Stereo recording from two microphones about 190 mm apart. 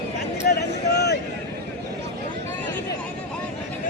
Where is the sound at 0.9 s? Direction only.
60° left (ahead or behind).